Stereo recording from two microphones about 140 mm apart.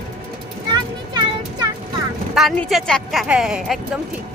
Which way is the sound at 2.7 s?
Centre (ahead or behind).